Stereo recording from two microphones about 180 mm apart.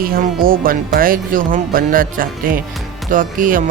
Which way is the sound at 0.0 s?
55° right (ahead or behind).